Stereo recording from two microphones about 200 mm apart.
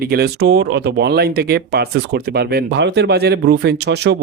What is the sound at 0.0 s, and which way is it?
Speech, 50° right (ahead or behind).